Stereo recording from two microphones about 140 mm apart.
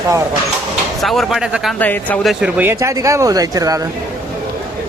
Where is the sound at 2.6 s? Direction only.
20° right (ahead or behind).